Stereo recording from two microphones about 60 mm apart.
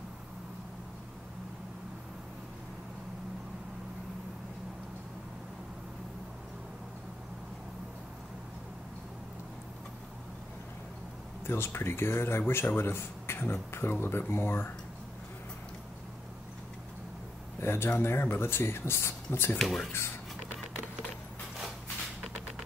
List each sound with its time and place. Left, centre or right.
11.4 s speech: left
17.6 s speech: left
19.6 s speech: centre